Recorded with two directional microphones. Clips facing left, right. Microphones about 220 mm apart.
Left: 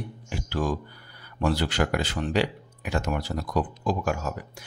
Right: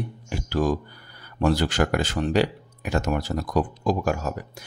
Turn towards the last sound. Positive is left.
turn(degrees=-40)  # may be behind; listen again after turning